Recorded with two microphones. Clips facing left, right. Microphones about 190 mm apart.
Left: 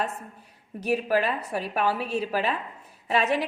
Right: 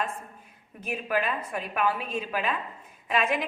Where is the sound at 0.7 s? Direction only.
35° left (ahead or behind).